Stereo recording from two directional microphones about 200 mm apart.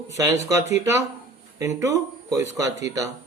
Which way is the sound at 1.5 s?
15° right (ahead or behind).